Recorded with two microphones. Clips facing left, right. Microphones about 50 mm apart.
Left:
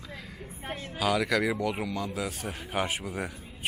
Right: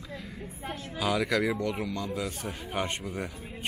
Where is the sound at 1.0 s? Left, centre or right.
Centre.